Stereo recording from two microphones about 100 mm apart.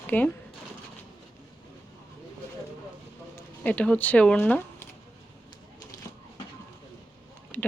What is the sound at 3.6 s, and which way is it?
Speech, 15° left (ahead or behind).